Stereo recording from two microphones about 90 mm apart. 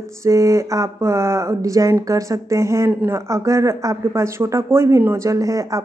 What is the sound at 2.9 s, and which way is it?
Speech, 20° right (ahead or behind).